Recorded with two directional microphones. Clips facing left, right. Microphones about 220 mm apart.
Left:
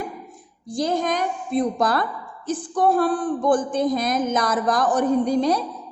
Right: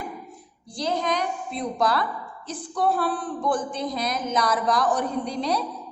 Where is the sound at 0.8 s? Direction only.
45° left (ahead or behind).